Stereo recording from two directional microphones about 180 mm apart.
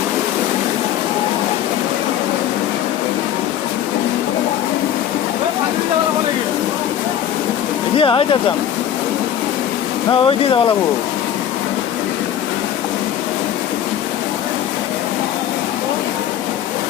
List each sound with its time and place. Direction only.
7.9 s speech: 30° left (ahead or behind)
10.1 s speech: 30° left (ahead or behind)